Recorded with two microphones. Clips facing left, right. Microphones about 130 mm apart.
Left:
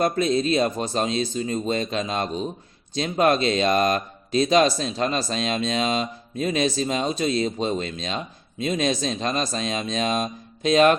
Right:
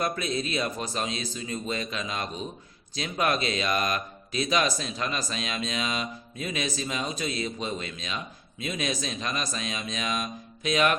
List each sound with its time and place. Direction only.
0.0 s speech: 30° left (ahead or behind)